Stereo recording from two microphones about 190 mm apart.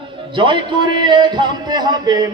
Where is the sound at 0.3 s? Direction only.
25° right (ahead or behind).